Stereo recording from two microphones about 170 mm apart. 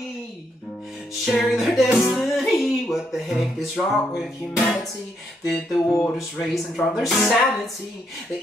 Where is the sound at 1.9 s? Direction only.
Centre (ahead or behind).